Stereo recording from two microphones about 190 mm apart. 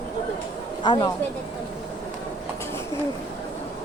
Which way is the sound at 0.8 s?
25° left (ahead or behind).